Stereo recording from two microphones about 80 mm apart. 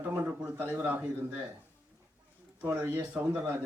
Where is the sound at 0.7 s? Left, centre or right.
Right.